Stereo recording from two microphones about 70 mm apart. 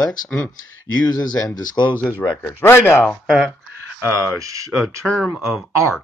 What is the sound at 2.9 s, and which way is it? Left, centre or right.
Speech, left.